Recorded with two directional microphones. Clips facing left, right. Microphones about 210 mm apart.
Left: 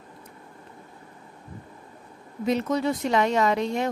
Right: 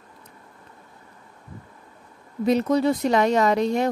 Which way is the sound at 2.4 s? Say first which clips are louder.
Right 4 dB; 35° right (ahead or behind).